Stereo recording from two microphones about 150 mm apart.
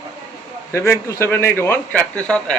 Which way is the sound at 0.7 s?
20° left (ahead or behind).